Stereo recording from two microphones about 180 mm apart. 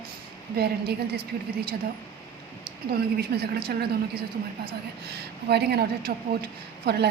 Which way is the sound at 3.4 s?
60° right (ahead or behind).